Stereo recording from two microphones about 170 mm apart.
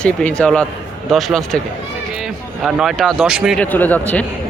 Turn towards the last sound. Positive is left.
turn(degrees=10)  # may be behind; listen again after turning